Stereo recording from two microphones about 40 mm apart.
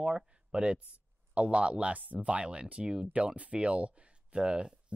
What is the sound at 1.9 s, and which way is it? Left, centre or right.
Speech, right.